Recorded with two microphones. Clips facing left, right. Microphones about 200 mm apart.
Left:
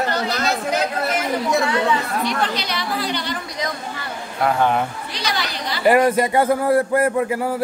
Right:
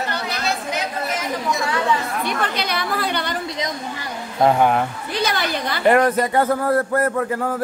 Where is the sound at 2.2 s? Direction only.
55° right (ahead or behind).